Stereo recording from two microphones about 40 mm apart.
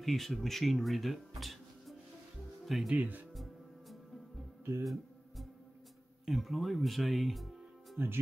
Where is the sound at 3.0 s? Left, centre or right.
Right.